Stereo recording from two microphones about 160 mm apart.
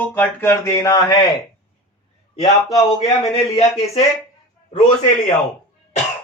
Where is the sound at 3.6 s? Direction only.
40° left (ahead or behind).